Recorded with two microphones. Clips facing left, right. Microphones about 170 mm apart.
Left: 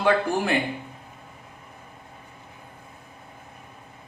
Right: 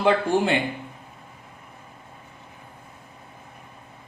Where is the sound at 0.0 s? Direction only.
25° right (ahead or behind).